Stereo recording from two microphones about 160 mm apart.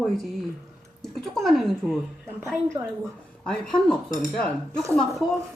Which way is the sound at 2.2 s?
15° right (ahead or behind).